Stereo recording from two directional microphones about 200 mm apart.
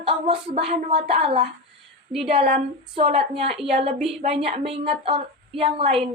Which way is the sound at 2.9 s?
30° right (ahead or behind).